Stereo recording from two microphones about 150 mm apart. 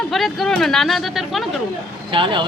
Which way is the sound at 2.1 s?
35° right (ahead or behind).